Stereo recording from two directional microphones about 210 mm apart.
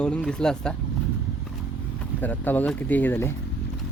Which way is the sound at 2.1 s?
10° left (ahead or behind).